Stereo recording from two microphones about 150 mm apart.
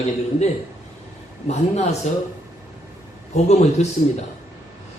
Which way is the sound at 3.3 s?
50° left (ahead or behind).